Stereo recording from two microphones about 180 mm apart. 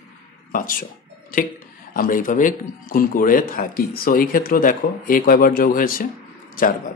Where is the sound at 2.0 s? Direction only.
50° left (ahead or behind).